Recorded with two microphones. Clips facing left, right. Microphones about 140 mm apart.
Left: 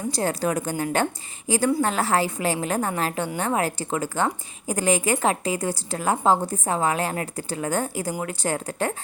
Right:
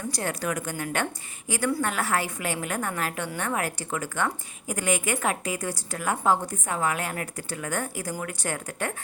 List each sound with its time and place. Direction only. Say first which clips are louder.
0.1 s a woman's voice: left 6 dB; 30° left (ahead or behind)